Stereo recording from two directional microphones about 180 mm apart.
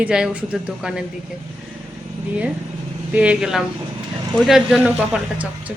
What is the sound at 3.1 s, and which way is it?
Speech, 5° right (ahead or behind).